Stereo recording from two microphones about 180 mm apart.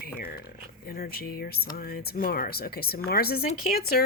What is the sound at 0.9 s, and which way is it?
Speech, 55° left (ahead or behind).